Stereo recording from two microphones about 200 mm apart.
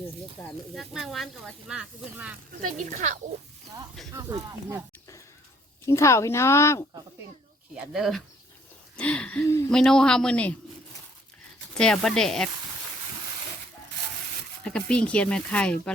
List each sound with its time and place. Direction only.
0.4 s speech: 10° left (ahead or behind)
0.8 s speech: centre (ahead or behind)
2.6 s speech: 40° right (ahead or behind)
4.1 s speech: 15° right (ahead or behind)
5.8 s speech: 15° left (ahead or behind)
7.9 s speech: centre (ahead or behind)
11.8 s speech: 5° left (ahead or behind)
14.6 s speech: 5° left (ahead or behind)